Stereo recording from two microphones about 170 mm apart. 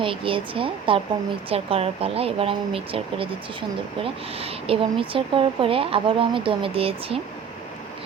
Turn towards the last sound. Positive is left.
turn(degrees=-35)  # may be behind; listen again after turning